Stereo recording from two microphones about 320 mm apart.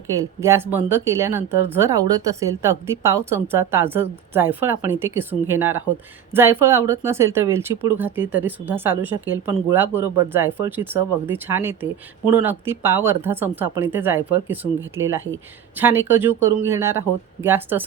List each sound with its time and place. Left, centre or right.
0.3 s speech: centre
15.8 s speech: centre